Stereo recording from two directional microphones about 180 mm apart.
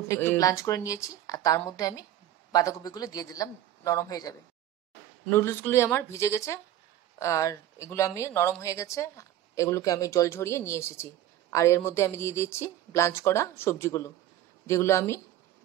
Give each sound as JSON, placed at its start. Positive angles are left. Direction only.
{"t": 0.1, "sound": "speech", "side_deg": 15}